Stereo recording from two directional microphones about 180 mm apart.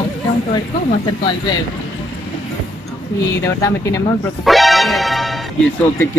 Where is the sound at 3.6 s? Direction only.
15° left (ahead or behind).